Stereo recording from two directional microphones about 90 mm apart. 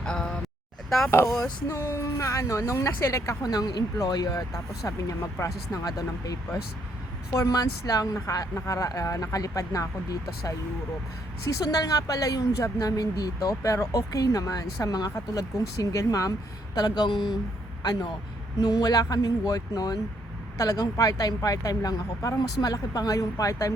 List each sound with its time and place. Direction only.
0.0 s a sound: 10° left (ahead or behind)
0.9 s speech: 5° left (ahead or behind)
1.1 s a woman's voice: 30° left (ahead or behind)
11.4 s a woman's voice: 40° left (ahead or behind)
16.7 s speech: 55° left (ahead or behind)
18.6 s speech: 50° left (ahead or behind)